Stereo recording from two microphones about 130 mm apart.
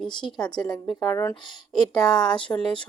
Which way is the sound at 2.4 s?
5° left (ahead or behind).